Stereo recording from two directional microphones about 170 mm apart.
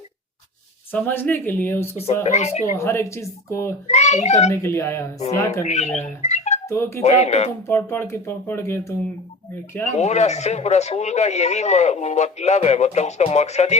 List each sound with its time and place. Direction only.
0.9 s speech: 10° left (ahead or behind)
2.2 s speech: 40° left (ahead or behind)
2.7 s speech: 15° left (ahead or behind)
3.8 s a child's voice: 40° left (ahead or behind)
4.4 s speech: 15° left (ahead or behind)
5.6 s speech: 40° left (ahead or behind)
6.2 s a sound: 40° left (ahead or behind)
6.7 s speech: 15° left (ahead or behind)
7.0 s speech: 40° left (ahead or behind)
7.7 s speech: 15° left (ahead or behind)
9.9 s speech: 40° left (ahead or behind)